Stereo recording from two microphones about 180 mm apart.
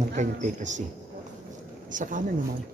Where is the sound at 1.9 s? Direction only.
45° right (ahead or behind).